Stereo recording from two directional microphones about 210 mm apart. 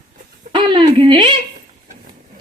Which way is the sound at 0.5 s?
25° right (ahead or behind).